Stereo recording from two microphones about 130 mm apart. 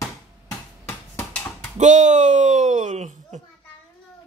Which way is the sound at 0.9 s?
15° left (ahead or behind).